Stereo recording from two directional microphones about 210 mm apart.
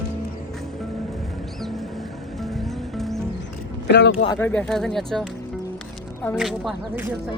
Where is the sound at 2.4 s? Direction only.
Centre (ahead or behind).